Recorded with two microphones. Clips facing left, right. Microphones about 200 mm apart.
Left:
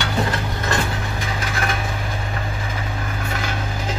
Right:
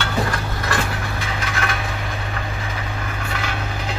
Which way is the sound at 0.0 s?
20° left (ahead or behind).